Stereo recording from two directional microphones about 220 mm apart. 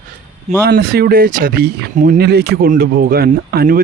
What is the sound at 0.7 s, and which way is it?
Speech, 45° right (ahead or behind).